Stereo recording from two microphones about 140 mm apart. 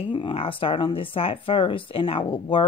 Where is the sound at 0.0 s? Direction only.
35° left (ahead or behind).